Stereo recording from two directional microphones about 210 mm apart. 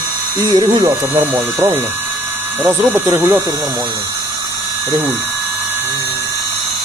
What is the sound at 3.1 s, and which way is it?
Speech, 10° right (ahead or behind).